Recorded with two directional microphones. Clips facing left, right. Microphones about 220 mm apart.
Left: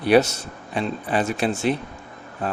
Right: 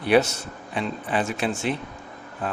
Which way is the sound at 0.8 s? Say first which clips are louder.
Left 3 dB; 40° left (ahead or behind).